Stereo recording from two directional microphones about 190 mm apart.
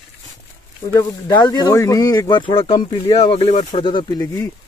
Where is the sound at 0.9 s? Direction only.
20° left (ahead or behind).